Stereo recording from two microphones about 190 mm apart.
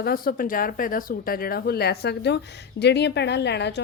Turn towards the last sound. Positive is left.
turn(degrees=65)  # may be behind; listen again after turning